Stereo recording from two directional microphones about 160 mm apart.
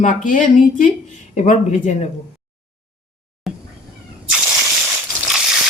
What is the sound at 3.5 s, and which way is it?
Cat, centre (ahead or behind).